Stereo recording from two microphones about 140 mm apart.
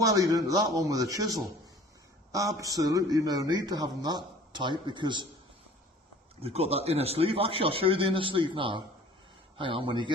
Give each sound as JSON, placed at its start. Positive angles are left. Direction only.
{"t": 0.0, "sound": "a man's voice", "side_deg": -25}
{"t": 6.4, "sound": "a man's voice", "side_deg": -45}